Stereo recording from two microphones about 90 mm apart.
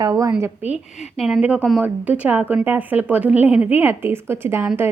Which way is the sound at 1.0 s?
5° right (ahead or behind).